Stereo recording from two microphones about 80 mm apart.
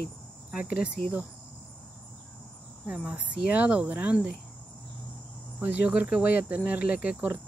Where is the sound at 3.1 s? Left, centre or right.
Centre.